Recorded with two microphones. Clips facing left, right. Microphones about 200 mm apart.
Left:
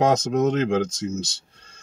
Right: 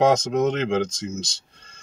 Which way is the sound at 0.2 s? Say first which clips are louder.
Left 1 dB; 5° left (ahead or behind).